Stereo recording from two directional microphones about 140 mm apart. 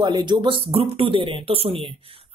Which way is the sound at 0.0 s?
30° right (ahead or behind).